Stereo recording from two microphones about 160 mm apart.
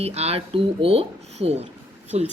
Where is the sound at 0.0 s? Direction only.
40° right (ahead or behind).